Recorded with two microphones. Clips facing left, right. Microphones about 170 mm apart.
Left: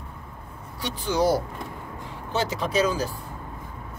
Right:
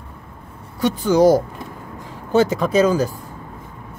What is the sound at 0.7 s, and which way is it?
Speech, 45° right (ahead or behind).